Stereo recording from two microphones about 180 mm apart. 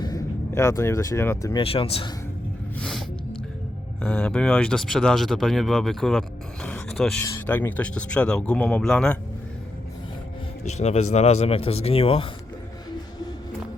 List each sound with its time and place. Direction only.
0.0 s speech: 20° left (ahead or behind)
1.6 s speech: 30° left (ahead or behind)
2.7 s a sound: 5° left (ahead or behind)
4.0 s speech: 5° left (ahead or behind)
10.6 s speech: 40° left (ahead or behind)